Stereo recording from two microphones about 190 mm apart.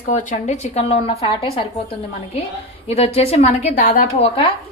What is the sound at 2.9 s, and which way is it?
Speech, 35° left (ahead or behind).